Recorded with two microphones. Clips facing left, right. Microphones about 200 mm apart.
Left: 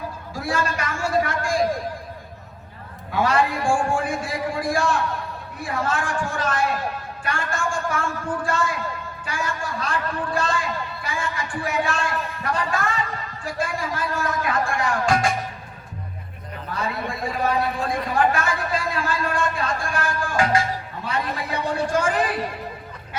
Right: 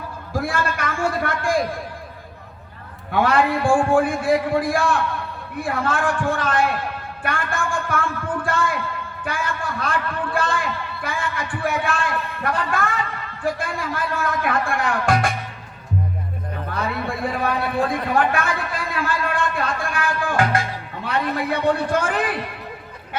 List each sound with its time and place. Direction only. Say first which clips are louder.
0.3 s a sound: right 2 dB; 55° right (ahead or behind)
3.1 s speech: right 3 dB; 55° right (ahead or behind)
16.7 s a man's voice: right 2 dB; 55° right (ahead or behind)
20.2 s music: even; 55° right (ahead or behind)
21.0 s speech: right 6 dB; 55° right (ahead or behind)